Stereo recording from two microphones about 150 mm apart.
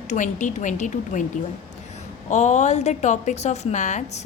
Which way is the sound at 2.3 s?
50° left (ahead or behind).